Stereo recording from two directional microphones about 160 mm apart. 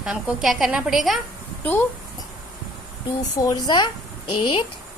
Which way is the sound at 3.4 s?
25° left (ahead or behind).